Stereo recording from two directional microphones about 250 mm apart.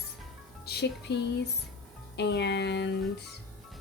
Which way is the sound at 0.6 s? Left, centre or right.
Left.